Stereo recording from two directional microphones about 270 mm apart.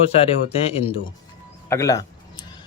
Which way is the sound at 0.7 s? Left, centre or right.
Left.